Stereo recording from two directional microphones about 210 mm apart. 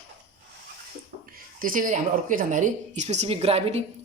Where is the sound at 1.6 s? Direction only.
40° right (ahead or behind).